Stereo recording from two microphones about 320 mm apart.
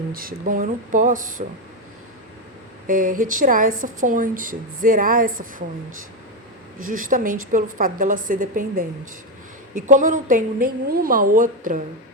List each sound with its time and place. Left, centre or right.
0.1 s speech: right
2.8 s speech: right
6.7 s speech: right
9.8 s speech: right